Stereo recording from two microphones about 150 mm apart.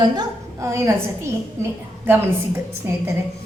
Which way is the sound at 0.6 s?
20° right (ahead or behind).